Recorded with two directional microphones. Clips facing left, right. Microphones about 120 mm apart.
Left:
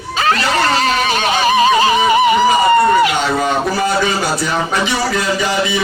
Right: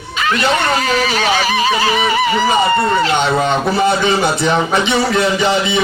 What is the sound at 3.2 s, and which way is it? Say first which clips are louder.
A man's voice: right 1 dB; 25° right (ahead or behind).